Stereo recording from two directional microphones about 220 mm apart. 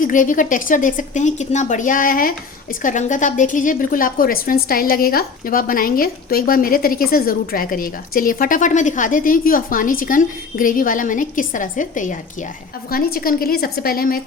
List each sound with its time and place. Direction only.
0.0 s a woman's voice: 35° left (ahead or behind)